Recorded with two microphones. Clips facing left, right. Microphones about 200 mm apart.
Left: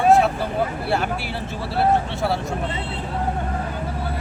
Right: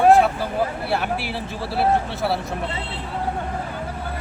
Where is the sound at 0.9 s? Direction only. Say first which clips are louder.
Left 1 dB; centre (ahead or behind).